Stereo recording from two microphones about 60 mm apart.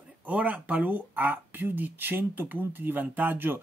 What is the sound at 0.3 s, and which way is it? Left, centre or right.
Speech, right.